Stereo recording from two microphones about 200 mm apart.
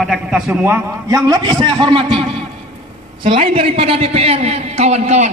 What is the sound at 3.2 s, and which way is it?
A man's voice, 25° right (ahead or behind).